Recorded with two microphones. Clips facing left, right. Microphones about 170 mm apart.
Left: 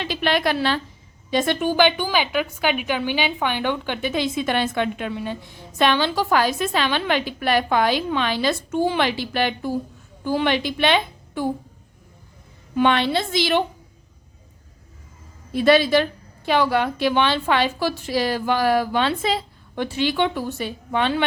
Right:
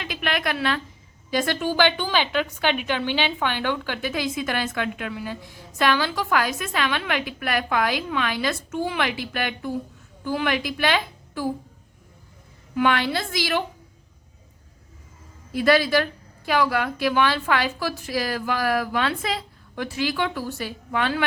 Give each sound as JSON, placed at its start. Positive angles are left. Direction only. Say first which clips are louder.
{"t": 0.0, "sound": "a woman's voice", "louder": "left 5 dB", "side_deg": 30}
{"t": 12.7, "sound": "a woman's voice", "louder": "left 3 dB", "side_deg": 25}
{"t": 15.5, "sound": "a woman's voice", "louder": "left 3 dB", "side_deg": 25}